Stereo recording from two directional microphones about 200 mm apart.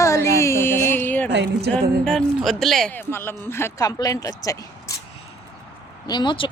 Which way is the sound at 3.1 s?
10° left (ahead or behind).